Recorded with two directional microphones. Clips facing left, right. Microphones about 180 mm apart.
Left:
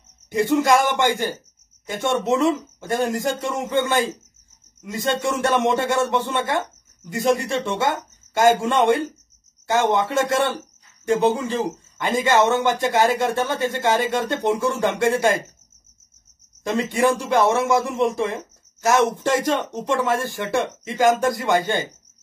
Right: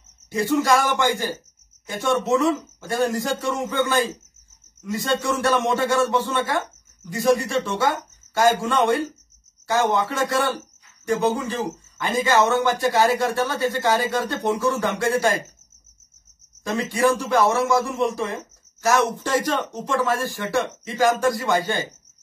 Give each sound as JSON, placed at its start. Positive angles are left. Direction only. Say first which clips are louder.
{"t": 0.4, "sound": "speech", "louder": "left 2 dB", "side_deg": 20}
{"t": 16.6, "sound": "speech", "louder": "left 1 dB", "side_deg": 25}